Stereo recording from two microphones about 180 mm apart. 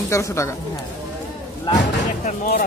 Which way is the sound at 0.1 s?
15° left (ahead or behind).